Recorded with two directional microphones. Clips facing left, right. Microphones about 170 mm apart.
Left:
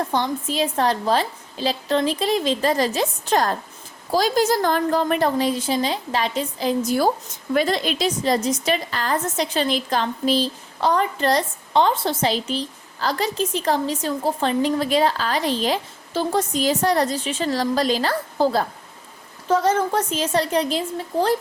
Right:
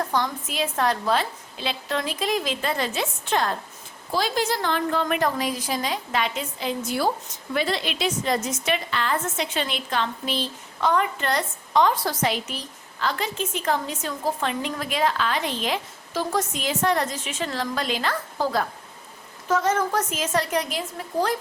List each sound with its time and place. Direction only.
0.1 s a woman's voice: 30° left (ahead or behind)